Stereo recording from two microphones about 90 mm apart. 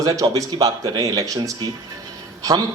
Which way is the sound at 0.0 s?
40° right (ahead or behind).